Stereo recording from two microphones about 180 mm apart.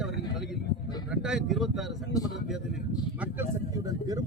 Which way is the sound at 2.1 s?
20° left (ahead or behind).